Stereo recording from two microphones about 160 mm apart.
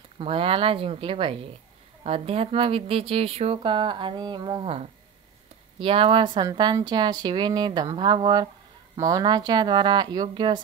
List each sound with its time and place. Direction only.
0.2 s speech: 35° right (ahead or behind)
5.8 s speech: 35° right (ahead or behind)